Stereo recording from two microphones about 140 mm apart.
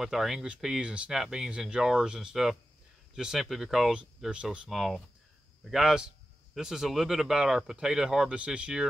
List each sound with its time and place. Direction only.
0.0 s speech: centre (ahead or behind)